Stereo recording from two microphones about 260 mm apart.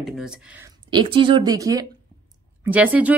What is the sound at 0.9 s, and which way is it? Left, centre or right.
A woman's voice, centre.